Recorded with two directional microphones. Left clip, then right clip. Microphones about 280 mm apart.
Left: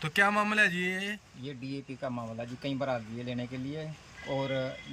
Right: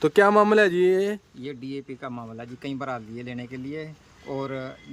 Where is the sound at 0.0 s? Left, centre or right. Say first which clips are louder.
Right 9 dB; right.